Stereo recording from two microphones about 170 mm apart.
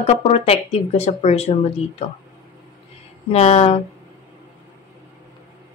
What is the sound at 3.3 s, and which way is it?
Speech, 40° left (ahead or behind).